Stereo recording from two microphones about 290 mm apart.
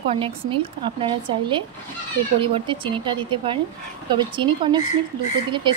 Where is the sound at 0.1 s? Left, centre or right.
Centre.